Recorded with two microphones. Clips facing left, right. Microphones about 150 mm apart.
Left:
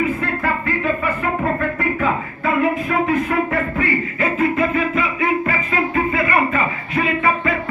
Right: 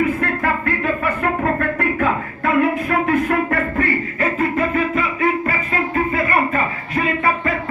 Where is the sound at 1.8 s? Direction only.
60° right (ahead or behind).